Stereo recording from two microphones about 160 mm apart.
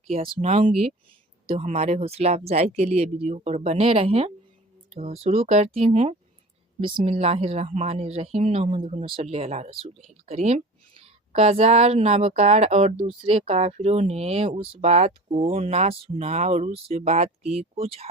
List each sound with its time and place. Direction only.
0.1 s a woman's voice: 45° right (ahead or behind)